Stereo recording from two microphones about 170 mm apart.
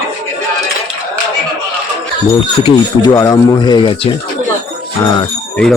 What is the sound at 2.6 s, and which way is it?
Speech, 25° left (ahead or behind).